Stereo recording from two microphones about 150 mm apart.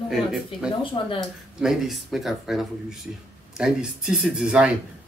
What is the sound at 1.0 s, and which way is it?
Speech, 35° left (ahead or behind).